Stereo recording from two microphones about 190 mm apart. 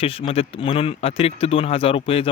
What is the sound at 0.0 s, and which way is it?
Speech, 30° left (ahead or behind).